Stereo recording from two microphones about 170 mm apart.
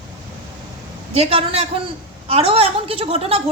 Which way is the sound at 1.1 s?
35° right (ahead or behind).